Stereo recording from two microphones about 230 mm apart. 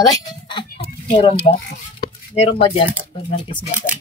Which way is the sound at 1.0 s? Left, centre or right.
Left.